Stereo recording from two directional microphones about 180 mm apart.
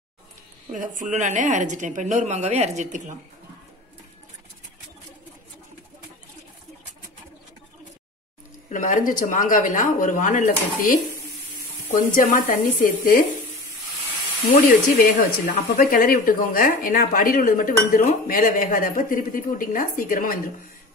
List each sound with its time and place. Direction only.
0.7 s a woman's voice: 45° right (ahead or behind)
8.6 s speech: 45° left (ahead or behind)
12.2 s speech: 50° left (ahead or behind)
14.6 s speech: 50° left (ahead or behind)